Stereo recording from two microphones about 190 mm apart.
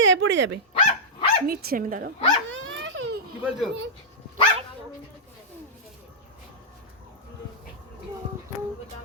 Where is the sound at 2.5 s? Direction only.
90° right.